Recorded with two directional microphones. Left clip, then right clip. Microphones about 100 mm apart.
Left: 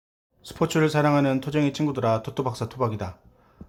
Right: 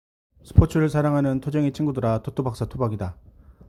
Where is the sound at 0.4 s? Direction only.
40° right (ahead or behind).